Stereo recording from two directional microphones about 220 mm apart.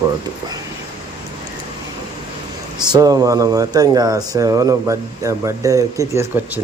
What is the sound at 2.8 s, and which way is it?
Speech, 15° right (ahead or behind).